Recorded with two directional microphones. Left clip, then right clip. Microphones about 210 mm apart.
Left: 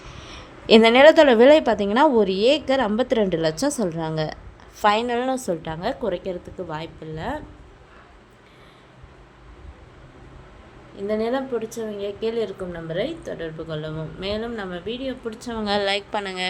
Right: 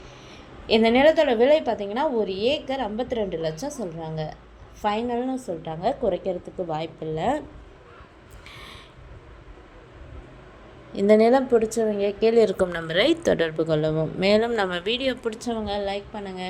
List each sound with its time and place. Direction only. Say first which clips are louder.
0.0 s a woman's voice: left 4 dB; 30° left (ahead or behind)
5.6 s a woman's voice: right 1 dB; 10° left (ahead or behind); by 7.4 s 15° right (ahead or behind)
10.9 s a woman's voice: right 7 dB; 35° right (ahead or behind); by 12.4 s 15° right (ahead or behind)
12.5 s a woman's voice: right 5 dB; 50° right (ahead or behind)
13.6 s speech: right 8 dB; 30° right (ahead or behind)
15.3 s a woman's voice: right 3 dB; 20° right (ahead or behind)
15.5 s a woman's voice: left 9 dB; 30° left (ahead or behind)
15.9 s a woman's voice: left 6 dB; 45° left (ahead or behind)